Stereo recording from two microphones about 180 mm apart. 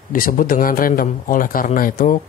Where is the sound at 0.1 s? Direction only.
50° left (ahead or behind).